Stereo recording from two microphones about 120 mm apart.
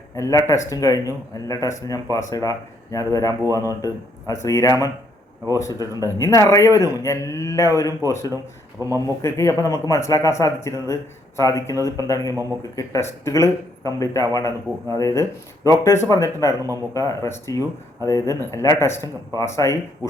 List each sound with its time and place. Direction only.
0.2 s speech: 25° left (ahead or behind)